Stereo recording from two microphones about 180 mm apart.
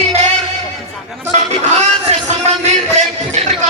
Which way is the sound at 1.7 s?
35° right (ahead or behind).